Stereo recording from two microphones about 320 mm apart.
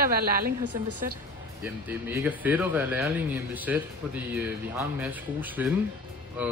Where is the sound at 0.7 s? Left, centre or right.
Right.